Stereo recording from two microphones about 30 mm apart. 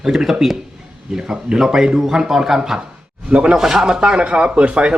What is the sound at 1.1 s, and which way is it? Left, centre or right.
A man's voice, right.